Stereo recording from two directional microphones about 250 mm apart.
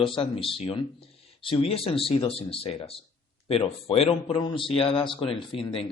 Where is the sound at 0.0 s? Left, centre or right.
Left.